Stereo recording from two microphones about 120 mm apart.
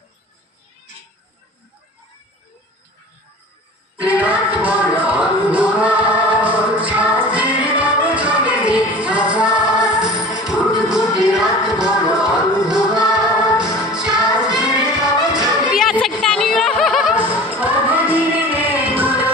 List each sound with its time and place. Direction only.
4.0 s music: 10° right (ahead or behind)
15.6 s children playing: 5° right (ahead or behind)
16.2 s music: 5° left (ahead or behind)
17.0 s music: 15° right (ahead or behind)